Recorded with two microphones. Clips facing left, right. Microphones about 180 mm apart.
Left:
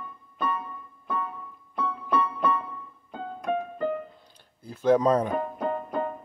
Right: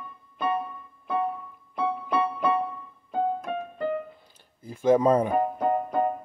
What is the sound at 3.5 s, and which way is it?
Music, 50° left (ahead or behind).